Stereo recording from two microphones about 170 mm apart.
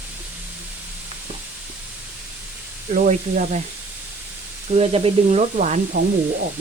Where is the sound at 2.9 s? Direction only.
45° right (ahead or behind).